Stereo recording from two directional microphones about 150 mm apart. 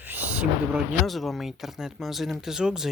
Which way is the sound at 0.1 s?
10° right (ahead or behind).